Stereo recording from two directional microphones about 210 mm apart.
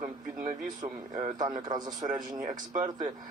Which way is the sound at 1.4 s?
20° right (ahead or behind).